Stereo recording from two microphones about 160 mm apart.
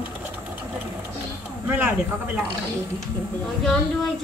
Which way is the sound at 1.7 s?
10° right (ahead or behind).